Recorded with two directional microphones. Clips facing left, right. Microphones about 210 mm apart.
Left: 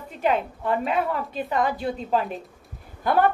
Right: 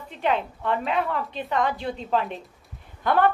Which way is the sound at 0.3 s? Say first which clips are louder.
Left 1 dB; 45° left (ahead or behind).